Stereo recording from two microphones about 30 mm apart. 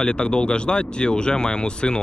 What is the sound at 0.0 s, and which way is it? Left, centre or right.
Speech, left.